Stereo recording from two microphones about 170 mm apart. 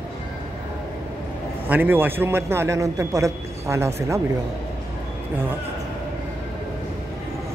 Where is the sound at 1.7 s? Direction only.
10° right (ahead or behind).